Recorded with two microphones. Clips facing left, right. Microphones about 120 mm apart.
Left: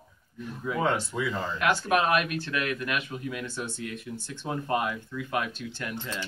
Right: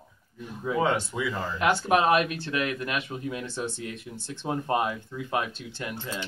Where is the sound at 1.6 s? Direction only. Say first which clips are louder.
Right 2 dB; 25° right (ahead or behind).